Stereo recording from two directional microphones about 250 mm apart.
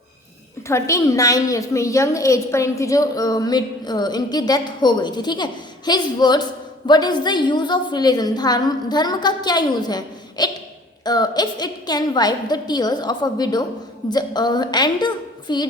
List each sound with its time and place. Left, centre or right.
0.7 s a woman's voice: centre